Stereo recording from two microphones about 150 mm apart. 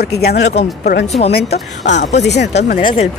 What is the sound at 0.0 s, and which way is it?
Speech, 90° left.